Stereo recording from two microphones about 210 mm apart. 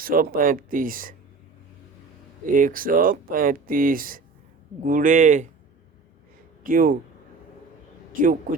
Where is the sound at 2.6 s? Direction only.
40° right (ahead or behind).